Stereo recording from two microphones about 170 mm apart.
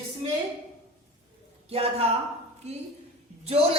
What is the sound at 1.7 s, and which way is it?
Speech, 35° right (ahead or behind).